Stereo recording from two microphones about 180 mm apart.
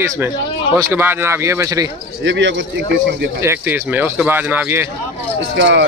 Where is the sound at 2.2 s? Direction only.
90° right.